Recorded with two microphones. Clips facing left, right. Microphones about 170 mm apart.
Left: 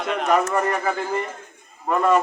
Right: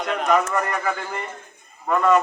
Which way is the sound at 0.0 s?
Centre (ahead or behind).